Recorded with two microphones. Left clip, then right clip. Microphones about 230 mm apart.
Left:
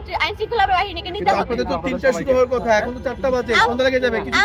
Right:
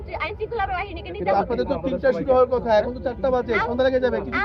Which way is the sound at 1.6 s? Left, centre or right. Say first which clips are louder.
Left 2 dB; left.